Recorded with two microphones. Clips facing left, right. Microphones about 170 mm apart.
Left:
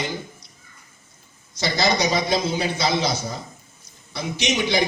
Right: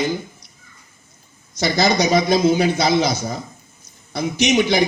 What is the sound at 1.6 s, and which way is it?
A man's voice, 45° right (ahead or behind).